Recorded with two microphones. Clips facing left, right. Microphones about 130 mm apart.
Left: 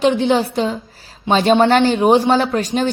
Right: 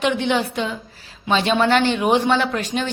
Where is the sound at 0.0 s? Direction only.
35° left (ahead or behind).